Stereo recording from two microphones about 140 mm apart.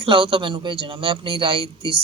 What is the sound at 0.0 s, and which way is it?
A man's voice, 40° right (ahead or behind).